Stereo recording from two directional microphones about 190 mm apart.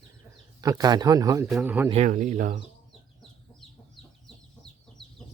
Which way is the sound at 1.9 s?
40° right (ahead or behind).